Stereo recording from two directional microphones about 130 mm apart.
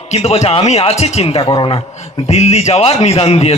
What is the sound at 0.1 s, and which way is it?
Speech, 55° left (ahead or behind).